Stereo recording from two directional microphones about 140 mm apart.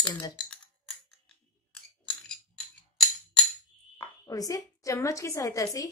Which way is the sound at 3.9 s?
25° left (ahead or behind).